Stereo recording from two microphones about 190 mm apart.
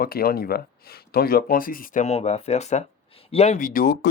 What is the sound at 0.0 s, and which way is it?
Speech, 50° left (ahead or behind).